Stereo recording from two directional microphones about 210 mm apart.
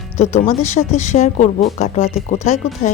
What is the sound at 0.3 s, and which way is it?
Speech, 35° left (ahead or behind).